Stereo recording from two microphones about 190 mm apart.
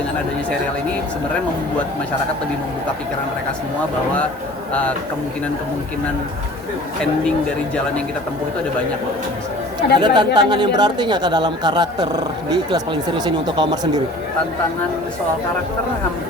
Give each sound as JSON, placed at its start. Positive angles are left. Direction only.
{"t": 4.7, "sound": "speech", "side_deg": 5}
{"t": 10.0, "sound": "speech", "side_deg": -25}